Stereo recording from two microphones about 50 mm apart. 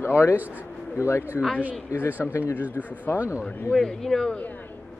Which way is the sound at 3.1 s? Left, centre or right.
Right.